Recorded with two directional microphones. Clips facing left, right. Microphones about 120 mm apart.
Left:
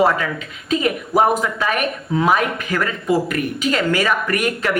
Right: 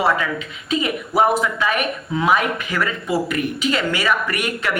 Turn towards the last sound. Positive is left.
turn(degrees=40)  # may be behind; listen again after turning